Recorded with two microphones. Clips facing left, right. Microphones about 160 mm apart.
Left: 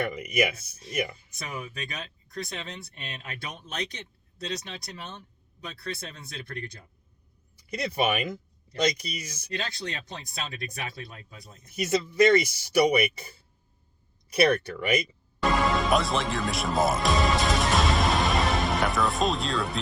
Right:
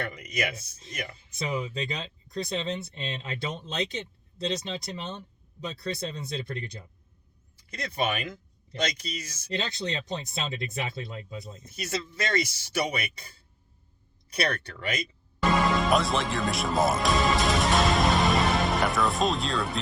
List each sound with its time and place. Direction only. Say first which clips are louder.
0.0 s speech: left 5 dB; 10° left (ahead or behind)
1.4 s speech: right 6 dB; 25° right (ahead or behind)
6.0 s speech: right 7 dB; 20° right (ahead or behind)
7.7 s speech: left 3 dB; 10° left (ahead or behind)
9.6 s speech: right 3 dB; 25° right (ahead or behind)
11.7 s speech: left 7 dB; 15° left (ahead or behind)
14.3 s speech: left 7 dB; 15° left (ahead or behind)
15.4 s music: even; centre (ahead or behind)